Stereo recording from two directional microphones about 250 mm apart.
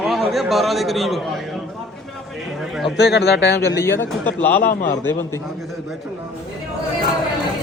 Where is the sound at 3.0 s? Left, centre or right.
Left.